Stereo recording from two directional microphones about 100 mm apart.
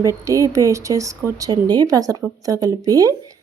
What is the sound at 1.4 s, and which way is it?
Speech, 45° right (ahead or behind).